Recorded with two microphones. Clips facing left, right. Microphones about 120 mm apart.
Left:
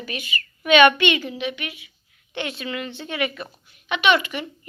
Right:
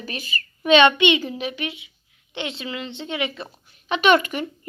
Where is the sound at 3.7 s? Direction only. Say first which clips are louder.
Right 3 dB; 40° right (ahead or behind).